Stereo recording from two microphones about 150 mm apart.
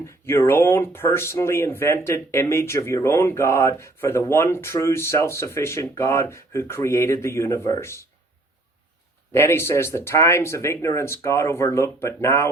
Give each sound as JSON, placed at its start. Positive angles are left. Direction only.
{"t": 0.0, "sound": "speech", "side_deg": 15}
{"t": 9.3, "sound": "speech", "side_deg": 15}